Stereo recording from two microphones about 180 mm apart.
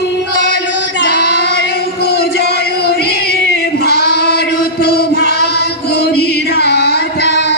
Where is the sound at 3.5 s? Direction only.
60° left (ahead or behind).